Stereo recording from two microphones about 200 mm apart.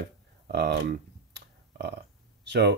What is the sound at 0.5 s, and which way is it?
Computer keyboard, 55° right (ahead or behind).